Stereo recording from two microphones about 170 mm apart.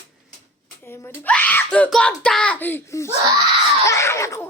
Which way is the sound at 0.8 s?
15° left (ahead or behind).